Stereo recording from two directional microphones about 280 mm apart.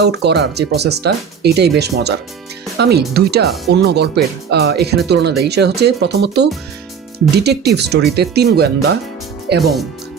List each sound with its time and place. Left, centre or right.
0.0 s speech: right